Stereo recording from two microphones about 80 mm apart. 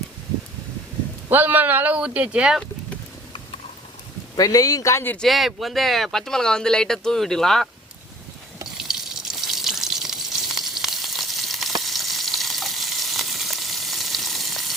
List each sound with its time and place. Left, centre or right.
1.3 s speech: right
4.4 s speech: left
5.2 s speech: centre
8.8 s water: centre